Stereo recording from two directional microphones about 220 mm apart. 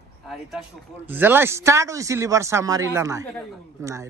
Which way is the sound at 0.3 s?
Centre (ahead or behind).